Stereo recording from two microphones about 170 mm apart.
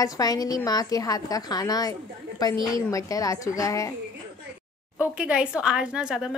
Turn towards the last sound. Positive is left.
turn(degrees=-5)  # may be behind; listen again after turning